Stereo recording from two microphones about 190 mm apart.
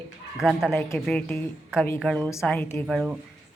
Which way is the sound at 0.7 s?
10° left (ahead or behind).